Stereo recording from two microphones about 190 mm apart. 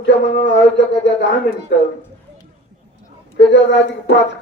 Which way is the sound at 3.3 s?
65° left (ahead or behind).